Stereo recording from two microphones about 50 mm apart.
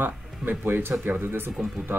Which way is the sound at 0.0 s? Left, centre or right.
Right.